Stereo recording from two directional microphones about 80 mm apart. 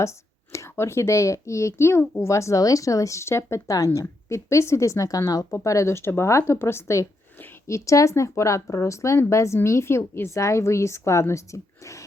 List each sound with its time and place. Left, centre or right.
0.0 s speech: left